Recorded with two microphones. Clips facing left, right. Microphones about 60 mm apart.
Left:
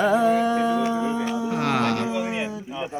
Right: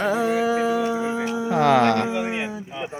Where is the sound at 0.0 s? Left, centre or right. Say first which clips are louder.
Left 2 dB; centre.